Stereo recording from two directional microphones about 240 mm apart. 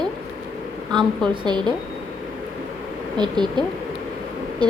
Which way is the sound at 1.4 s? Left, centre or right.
Centre.